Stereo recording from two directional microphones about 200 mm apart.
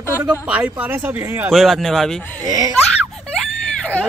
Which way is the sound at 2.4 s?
20° right (ahead or behind).